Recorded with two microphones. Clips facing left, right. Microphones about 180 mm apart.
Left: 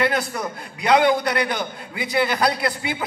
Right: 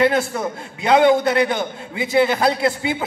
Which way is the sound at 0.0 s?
25° right (ahead or behind).